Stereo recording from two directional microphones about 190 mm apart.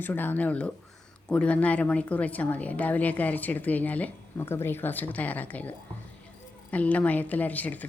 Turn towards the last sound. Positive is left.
turn(degrees=10)  # may be behind; listen again after turning